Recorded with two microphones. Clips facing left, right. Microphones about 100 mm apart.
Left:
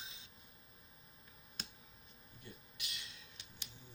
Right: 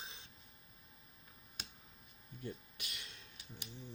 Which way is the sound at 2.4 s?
55° right (ahead or behind).